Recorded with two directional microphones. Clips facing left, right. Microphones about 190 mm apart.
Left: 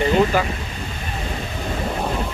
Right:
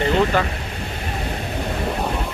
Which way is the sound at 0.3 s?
5° left (ahead or behind).